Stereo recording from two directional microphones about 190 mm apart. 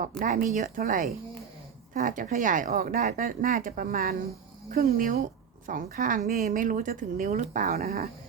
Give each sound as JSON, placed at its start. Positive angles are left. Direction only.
{"t": 0.2, "sound": "a woman's voice", "side_deg": -40}